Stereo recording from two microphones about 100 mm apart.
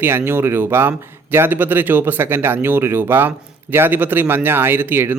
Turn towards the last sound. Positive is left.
turn(degrees=-20)  # may be behind; listen again after turning